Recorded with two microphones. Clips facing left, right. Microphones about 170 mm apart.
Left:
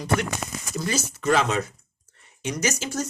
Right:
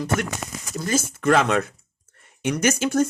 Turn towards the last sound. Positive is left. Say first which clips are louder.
# right 7 dB
turn(degrees=-55)  # may be behind; listen again after turning